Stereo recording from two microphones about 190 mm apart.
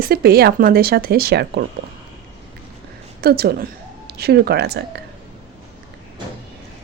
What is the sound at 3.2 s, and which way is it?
A woman's voice, 55° right (ahead or behind).